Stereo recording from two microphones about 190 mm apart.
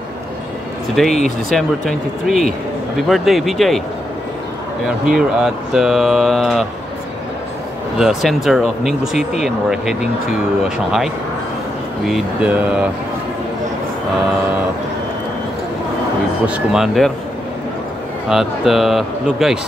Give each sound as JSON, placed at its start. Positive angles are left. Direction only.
{"t": 1.0, "sound": "speech", "side_deg": 0}
{"t": 4.8, "sound": "speech", "side_deg": -5}
{"t": 8.0, "sound": "speech", "side_deg": 0}
{"t": 12.1, "sound": "speech", "side_deg": -5}
{"t": 16.4, "sound": "speech", "side_deg": -5}
{"t": 18.3, "sound": "speech", "side_deg": 0}